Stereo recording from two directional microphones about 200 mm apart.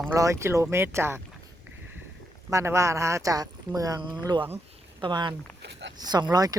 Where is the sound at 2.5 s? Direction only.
15° right (ahead or behind).